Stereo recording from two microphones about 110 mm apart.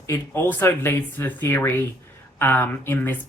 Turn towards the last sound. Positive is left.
turn(degrees=15)  # may be behind; listen again after turning